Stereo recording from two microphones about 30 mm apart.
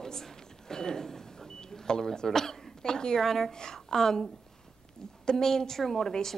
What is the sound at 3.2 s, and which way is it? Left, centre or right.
Speech, centre.